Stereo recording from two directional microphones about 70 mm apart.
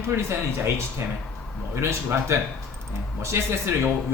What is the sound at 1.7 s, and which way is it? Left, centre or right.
A man's voice, right.